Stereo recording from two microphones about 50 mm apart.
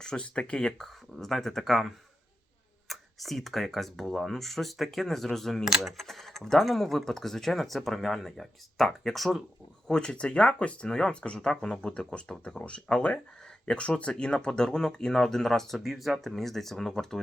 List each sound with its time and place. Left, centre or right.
0.0 s speech: centre
0.8 s speech: centre
9.8 s speech: centre